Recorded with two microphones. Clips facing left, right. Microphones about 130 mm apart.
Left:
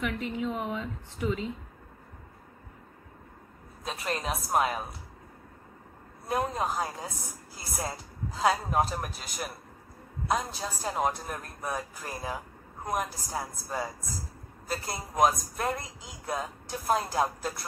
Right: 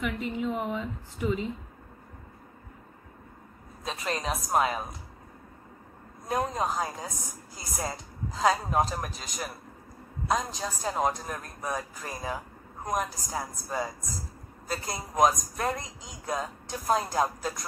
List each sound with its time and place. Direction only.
0.0 s a woman's voice: 5° right (ahead or behind)
3.8 s a woman's voice: 5° left (ahead or behind)
6.2 s a woman's voice: 5° left (ahead or behind)